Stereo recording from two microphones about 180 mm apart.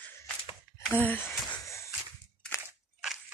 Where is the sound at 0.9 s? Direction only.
10° left (ahead or behind).